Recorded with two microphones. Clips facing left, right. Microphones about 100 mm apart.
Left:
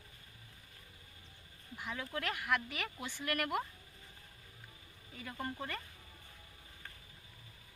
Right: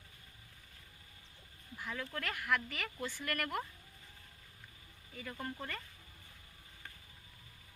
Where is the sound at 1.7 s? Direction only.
10° left (ahead or behind).